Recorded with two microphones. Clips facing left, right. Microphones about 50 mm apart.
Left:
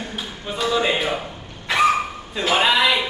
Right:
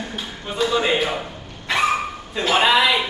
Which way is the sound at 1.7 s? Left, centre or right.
Centre.